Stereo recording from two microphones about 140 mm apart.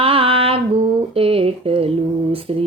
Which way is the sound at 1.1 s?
40° right (ahead or behind).